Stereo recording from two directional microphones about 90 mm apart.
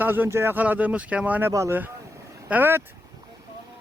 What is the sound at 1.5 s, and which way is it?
Speech, 35° right (ahead or behind).